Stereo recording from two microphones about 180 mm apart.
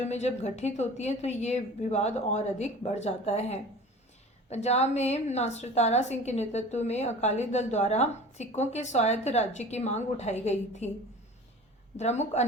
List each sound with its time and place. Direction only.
0.0 s a woman's voice: 40° left (ahead or behind)
11.9 s a woman's voice: 40° left (ahead or behind)